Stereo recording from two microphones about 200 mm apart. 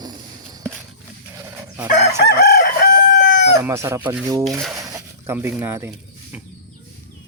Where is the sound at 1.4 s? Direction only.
15° right (ahead or behind).